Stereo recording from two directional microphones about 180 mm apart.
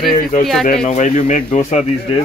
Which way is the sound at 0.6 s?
35° left (ahead or behind).